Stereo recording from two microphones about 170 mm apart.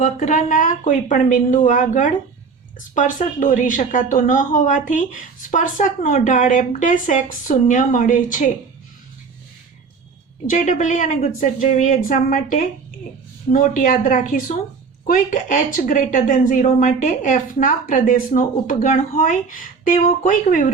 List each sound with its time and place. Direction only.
0.0 s speech: 45° left (ahead or behind)
10.4 s speech: 50° left (ahead or behind)